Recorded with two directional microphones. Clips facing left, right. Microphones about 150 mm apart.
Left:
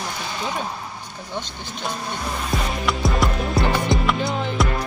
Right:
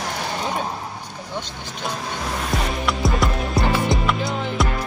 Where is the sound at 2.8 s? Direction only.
Centre (ahead or behind).